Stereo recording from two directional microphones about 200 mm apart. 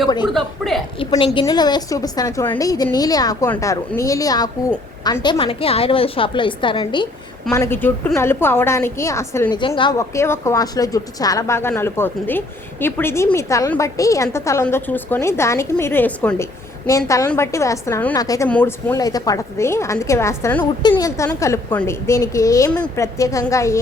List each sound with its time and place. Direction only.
0.3 s a woman's voice: centre (ahead or behind)
0.9 s a woman's voice: 25° left (ahead or behind)
7.5 s a woman's voice: 10° left (ahead or behind)
18.4 s a woman's voice: 10° left (ahead or behind)